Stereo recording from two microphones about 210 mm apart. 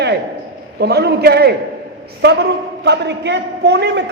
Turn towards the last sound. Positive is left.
turn(degrees=-55)  # may be behind; listen again after turning